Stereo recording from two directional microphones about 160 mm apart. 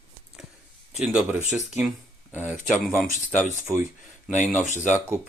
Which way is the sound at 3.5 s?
15° right (ahead or behind).